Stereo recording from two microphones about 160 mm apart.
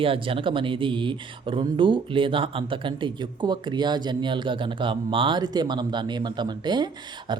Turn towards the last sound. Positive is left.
turn(degrees=-25)  # may be behind; listen again after turning